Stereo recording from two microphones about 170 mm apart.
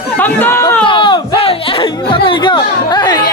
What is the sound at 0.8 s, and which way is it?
Chatter, 30° left (ahead or behind).